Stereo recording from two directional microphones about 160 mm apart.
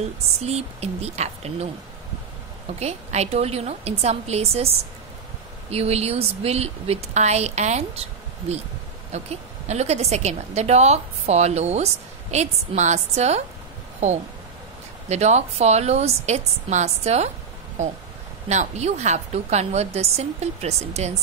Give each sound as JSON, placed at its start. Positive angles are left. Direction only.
{"t": 0.0, "sound": "a woman's voice", "side_deg": -40}
{"t": 2.8, "sound": "speech", "side_deg": -40}
{"t": 5.7, "sound": "a woman's voice", "side_deg": -40}
{"t": 15.0, "sound": "a woman's voice", "side_deg": -45}
{"t": 18.5, "sound": "a woman's voice", "side_deg": -45}